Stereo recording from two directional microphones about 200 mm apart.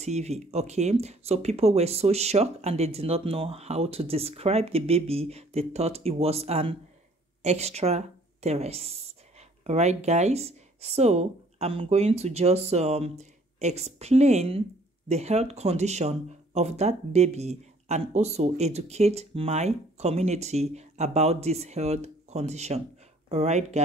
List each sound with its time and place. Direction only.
0.0 s speech: 35° right (ahead or behind)